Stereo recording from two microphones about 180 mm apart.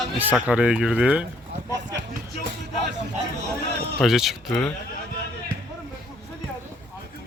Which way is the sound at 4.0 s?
Centre (ahead or behind).